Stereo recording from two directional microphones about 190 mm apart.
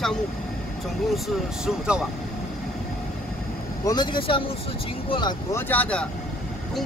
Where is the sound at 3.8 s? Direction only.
20° left (ahead or behind).